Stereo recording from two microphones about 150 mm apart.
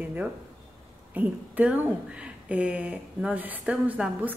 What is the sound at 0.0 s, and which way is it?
A woman's voice, 10° right (ahead or behind).